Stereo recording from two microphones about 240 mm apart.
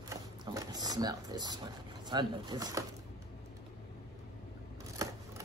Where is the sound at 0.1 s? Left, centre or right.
Centre.